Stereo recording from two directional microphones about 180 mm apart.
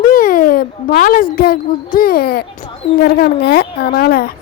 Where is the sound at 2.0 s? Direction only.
55° left (ahead or behind).